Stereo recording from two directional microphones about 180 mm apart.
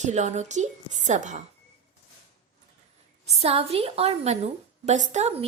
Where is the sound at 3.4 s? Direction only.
35° right (ahead or behind).